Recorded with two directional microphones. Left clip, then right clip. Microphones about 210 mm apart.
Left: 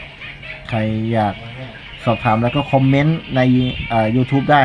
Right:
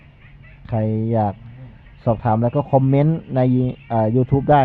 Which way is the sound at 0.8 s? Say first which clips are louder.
Left 1 dB; 30° right (ahead or behind).